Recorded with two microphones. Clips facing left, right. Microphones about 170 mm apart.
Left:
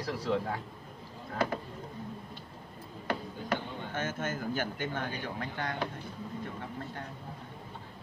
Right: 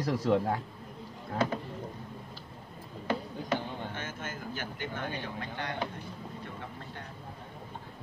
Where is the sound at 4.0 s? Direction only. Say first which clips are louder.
Left 5 dB; 50° left (ahead or behind).